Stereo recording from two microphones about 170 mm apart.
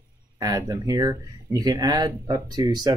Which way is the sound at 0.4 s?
20° right (ahead or behind).